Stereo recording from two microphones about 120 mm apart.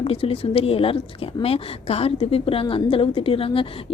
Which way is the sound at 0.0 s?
55° left (ahead or behind).